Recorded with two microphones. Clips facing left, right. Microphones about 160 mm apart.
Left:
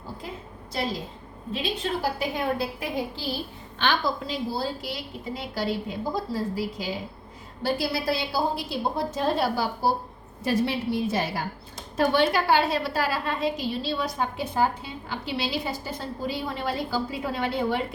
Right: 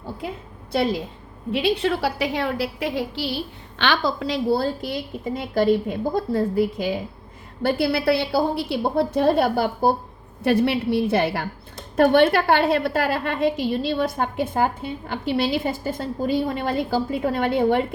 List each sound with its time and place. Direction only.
0.7 s a woman's voice: 65° right (ahead or behind)